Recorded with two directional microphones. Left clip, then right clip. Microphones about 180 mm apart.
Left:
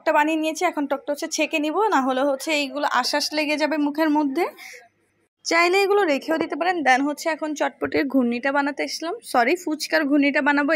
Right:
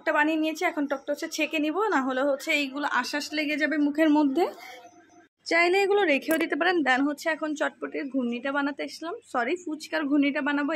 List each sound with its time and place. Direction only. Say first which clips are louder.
0.0 s a woman's voice: left 4 dB; 15° left (ahead or behind)
3.8 s a woman's voice: left 2 dB; 15° left (ahead or behind)
5.5 s a woman's voice: left 4 dB; 20° left (ahead or behind); by 6.8 s centre (ahead or behind)
6.8 s a woman's voice: left 5 dB; 10° left (ahead or behind)
7.8 s speech: left 9 dB; 35° left (ahead or behind)